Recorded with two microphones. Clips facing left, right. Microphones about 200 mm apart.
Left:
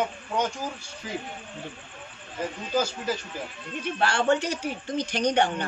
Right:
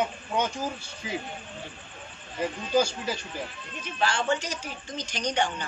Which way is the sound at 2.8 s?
5° left (ahead or behind).